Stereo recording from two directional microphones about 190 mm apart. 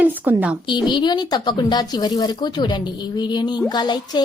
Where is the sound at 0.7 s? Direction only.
25° left (ahead or behind).